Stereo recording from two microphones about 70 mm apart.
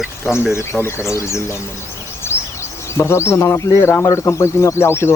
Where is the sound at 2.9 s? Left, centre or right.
Left.